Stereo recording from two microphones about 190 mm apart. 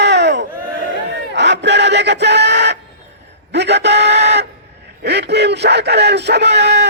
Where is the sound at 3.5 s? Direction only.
65° right (ahead or behind).